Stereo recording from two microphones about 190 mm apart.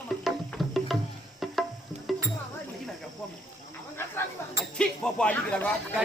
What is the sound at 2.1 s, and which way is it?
Music, centre (ahead or behind).